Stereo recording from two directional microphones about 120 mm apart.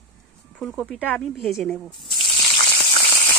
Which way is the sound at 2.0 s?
45° left (ahead or behind).